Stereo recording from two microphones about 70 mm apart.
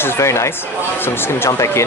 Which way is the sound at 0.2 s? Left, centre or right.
Left.